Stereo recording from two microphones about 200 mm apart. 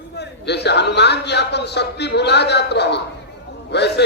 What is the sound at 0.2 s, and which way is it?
A man's voice, 55° left (ahead or behind).